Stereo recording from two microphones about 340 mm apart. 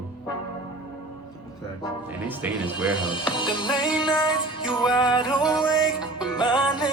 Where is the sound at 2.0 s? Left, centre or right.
Centre.